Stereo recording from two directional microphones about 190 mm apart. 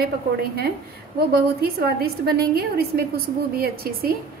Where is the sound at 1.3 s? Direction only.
55° right (ahead or behind).